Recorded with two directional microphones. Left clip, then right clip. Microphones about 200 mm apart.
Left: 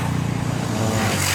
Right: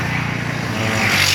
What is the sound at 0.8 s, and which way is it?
Vehicle, 15° right (ahead or behind).